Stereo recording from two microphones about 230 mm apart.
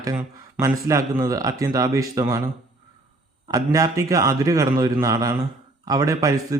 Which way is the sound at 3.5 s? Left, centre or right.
Centre.